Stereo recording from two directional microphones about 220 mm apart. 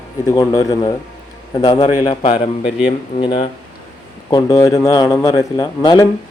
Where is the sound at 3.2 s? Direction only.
25° left (ahead or behind).